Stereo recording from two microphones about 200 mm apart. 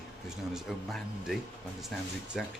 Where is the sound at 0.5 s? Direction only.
Centre (ahead or behind).